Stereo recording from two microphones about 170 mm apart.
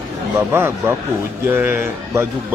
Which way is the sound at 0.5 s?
15° right (ahead or behind).